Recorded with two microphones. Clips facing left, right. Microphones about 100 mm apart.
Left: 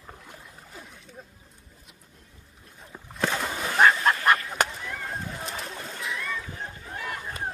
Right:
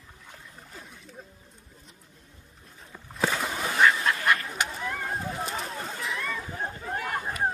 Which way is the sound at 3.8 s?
45° left (ahead or behind).